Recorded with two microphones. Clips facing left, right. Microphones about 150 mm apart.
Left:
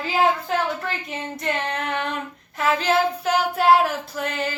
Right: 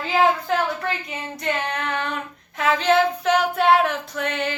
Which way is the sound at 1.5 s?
30° left (ahead or behind).